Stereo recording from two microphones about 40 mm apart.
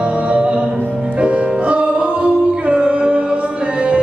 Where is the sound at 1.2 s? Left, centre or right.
Right.